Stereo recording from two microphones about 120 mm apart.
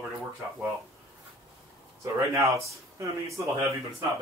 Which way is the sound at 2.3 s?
25° right (ahead or behind).